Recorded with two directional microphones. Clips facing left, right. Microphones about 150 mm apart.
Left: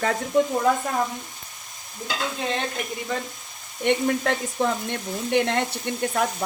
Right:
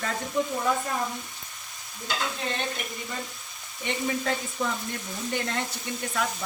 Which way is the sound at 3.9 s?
60° left (ahead or behind).